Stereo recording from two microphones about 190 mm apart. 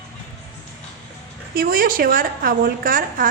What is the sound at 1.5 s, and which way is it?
A woman's voice, 50° right (ahead or behind).